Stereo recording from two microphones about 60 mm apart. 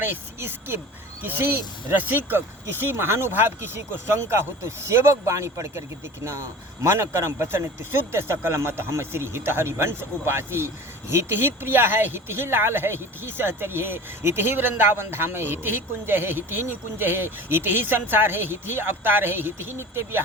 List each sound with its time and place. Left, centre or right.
0.0 s a man's voice: right
6.8 s a man's voice: right